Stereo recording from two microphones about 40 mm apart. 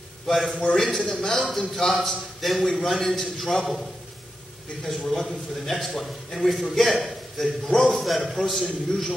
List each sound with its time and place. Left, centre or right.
0.6 s a man's voice: centre
4.8 s a man's voice: centre